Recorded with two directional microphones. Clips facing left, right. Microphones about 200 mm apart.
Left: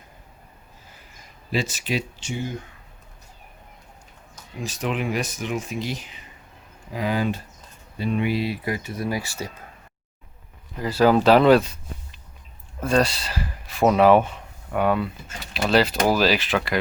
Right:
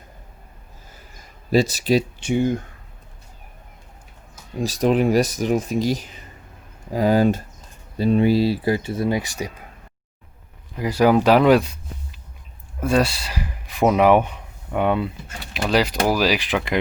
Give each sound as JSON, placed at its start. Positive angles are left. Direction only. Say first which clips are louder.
{"t": 1.5, "sound": "speech", "louder": "right 8 dB", "side_deg": -40}
{"t": 2.2, "sound": "speech", "louder": "right 10 dB", "side_deg": -60}
{"t": 4.5, "sound": "speech", "louder": "right 9 dB", "side_deg": -35}
{"t": 10.8, "sound": "speech", "louder": "right 1 dB", "side_deg": -15}
{"t": 12.8, "sound": "speech", "louder": "right 1 dB", "side_deg": -10}